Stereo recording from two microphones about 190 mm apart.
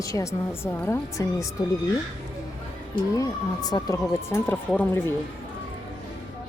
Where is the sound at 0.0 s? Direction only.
15° left (ahead or behind).